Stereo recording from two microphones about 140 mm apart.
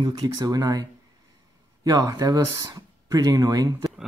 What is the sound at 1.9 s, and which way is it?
Speech, 25° right (ahead or behind).